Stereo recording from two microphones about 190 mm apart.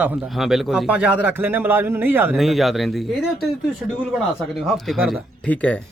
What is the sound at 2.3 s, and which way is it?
Speech, centre (ahead or behind).